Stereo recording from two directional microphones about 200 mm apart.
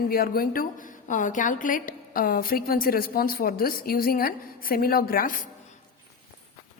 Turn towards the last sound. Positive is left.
turn(degrees=45)  # may be behind; listen again after turning